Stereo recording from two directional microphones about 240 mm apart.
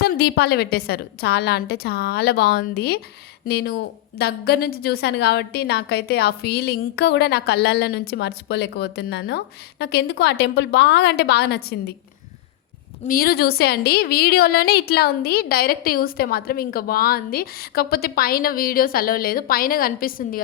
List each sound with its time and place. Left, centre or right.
0.0 s a woman's voice: left
13.1 s a woman's voice: left